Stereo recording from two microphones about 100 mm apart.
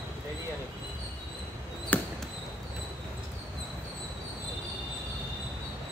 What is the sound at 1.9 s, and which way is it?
Basketball bounce, 20° left (ahead or behind).